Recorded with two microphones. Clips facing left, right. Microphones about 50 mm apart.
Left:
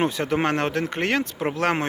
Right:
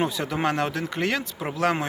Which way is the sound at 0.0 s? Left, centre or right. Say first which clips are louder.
Left 2 dB; left.